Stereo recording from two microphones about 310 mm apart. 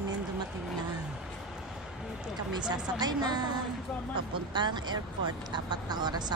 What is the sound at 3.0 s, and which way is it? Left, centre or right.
Speech, centre.